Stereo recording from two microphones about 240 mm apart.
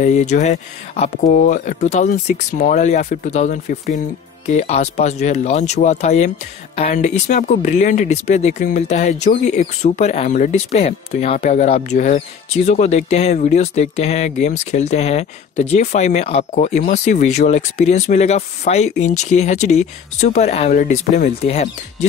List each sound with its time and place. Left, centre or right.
0.0 s speech: left